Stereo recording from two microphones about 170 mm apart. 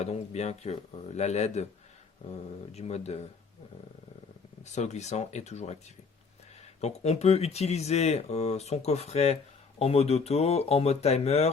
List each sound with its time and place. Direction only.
0.0 s speech: 40° left (ahead or behind)
4.6 s speech: 40° left (ahead or behind)
6.8 s speech: 40° left (ahead or behind)